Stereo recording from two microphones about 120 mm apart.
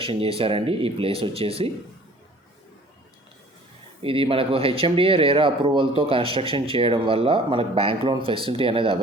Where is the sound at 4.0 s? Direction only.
50° right (ahead or behind).